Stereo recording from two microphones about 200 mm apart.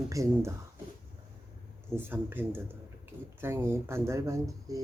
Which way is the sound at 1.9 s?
10° right (ahead or behind).